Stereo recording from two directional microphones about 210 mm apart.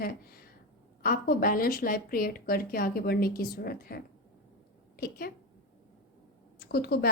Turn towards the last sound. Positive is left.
turn(degrees=50)  # may be behind; listen again after turning